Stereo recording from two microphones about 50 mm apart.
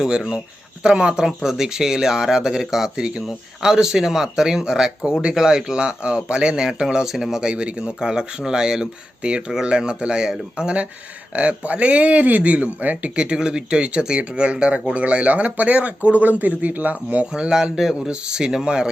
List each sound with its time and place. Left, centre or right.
0.8 s speech: centre
7.4 s speech: centre
11.3 s speech: right
13.1 s speech: centre; by 17.2 s right
17.3 s speech: centre